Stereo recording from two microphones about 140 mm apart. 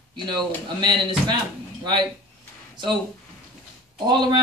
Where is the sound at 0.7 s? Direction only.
30° right (ahead or behind).